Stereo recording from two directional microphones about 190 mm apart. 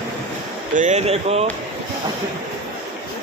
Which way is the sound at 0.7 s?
35° right (ahead or behind).